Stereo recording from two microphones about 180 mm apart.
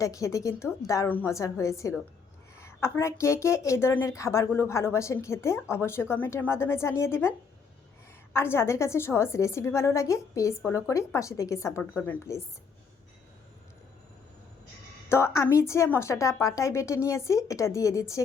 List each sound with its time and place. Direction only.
0.0 s a woman's voice: 20° left (ahead or behind)
15.1 s a woman's voice: 15° left (ahead or behind)